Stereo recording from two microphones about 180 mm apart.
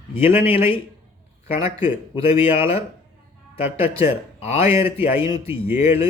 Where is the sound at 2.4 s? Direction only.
35° left (ahead or behind).